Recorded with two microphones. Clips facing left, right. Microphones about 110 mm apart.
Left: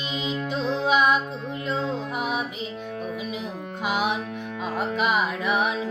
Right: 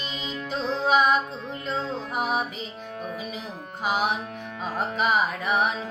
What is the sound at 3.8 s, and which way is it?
Music, 40° right (ahead or behind).